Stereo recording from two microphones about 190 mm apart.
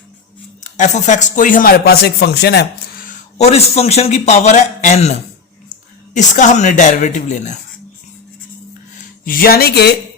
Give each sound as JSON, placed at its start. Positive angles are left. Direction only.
{"t": 0.6, "sound": "speech", "side_deg": 40}
{"t": 6.1, "sound": "speech", "side_deg": 40}
{"t": 9.0, "sound": "speech", "side_deg": 50}